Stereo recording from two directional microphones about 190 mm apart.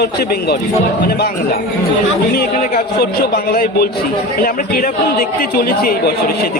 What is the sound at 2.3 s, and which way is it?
Speech, 50° left (ahead or behind).